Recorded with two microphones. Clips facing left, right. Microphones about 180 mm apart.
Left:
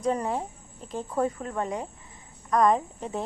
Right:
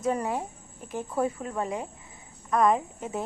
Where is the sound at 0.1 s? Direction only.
5° right (ahead or behind).